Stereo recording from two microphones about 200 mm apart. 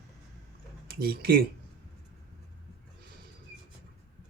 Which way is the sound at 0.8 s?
50° right (ahead or behind).